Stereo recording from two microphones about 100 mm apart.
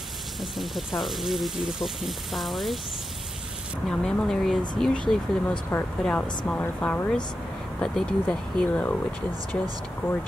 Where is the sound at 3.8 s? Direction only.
5° left (ahead or behind).